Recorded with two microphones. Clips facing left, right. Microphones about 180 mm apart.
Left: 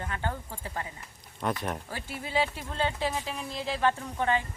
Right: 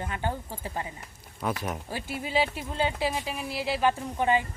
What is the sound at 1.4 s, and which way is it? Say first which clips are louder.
Speech: even; 5° right (ahead or behind).